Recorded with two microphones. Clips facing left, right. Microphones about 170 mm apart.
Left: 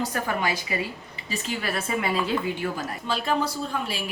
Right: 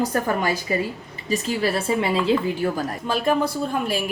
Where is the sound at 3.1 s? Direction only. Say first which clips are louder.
Right 4 dB; 50° right (ahead or behind).